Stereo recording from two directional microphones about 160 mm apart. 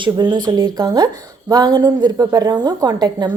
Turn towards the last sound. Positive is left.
turn(degrees=-25)  # may be behind; listen again after turning